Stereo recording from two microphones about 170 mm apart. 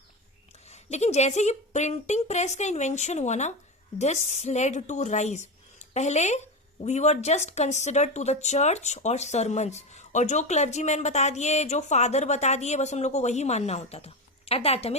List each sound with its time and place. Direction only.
0.7 s a woman's voice: 40° left (ahead or behind)